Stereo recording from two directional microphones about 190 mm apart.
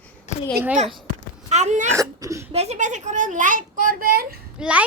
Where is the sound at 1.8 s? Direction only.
15° right (ahead or behind).